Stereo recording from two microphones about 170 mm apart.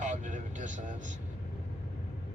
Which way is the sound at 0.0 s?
45° right (ahead or behind).